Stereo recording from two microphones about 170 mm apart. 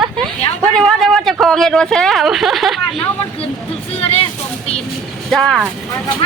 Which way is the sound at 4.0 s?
35° left (ahead or behind).